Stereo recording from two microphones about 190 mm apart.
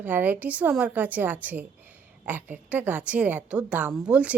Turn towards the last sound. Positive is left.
turn(degrees=-5)  # may be behind; listen again after turning